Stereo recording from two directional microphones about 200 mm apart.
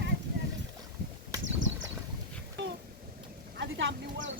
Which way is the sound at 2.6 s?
65° right (ahead or behind).